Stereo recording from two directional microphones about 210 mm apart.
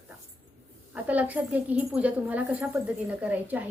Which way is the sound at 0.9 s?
5° right (ahead or behind).